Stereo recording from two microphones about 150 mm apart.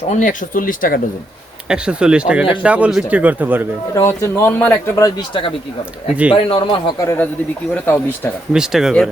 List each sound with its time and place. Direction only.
0.1 s speech: 60° left (ahead or behind)
1.6 s speech: 5° right (ahead or behind)
3.9 s speech: 20° left (ahead or behind)
6.3 s speech: 35° left (ahead or behind)
7.0 s speech: 20° left (ahead or behind)
8.5 s speech: 5° right (ahead or behind)